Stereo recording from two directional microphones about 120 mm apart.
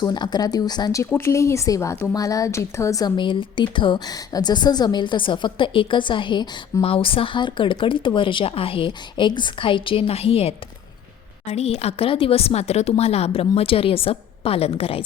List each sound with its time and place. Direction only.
0.0 s a woman's voice: 35° left (ahead or behind)
1.1 s a woman's voice: 25° left (ahead or behind)
3.2 s a woman's voice: 40° left (ahead or behind)